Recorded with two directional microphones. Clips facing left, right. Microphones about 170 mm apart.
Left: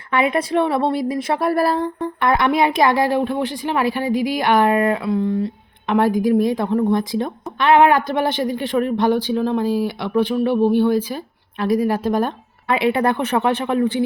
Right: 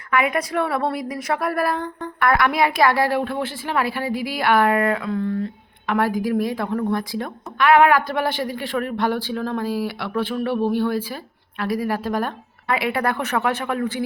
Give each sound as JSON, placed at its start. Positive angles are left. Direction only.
{"t": 0.1, "sound": "a woman's voice", "side_deg": 30}